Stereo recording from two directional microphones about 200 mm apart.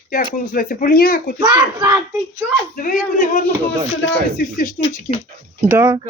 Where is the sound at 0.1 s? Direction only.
45° left (ahead or behind).